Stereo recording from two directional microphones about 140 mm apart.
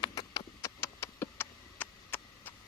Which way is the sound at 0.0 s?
25° left (ahead or behind).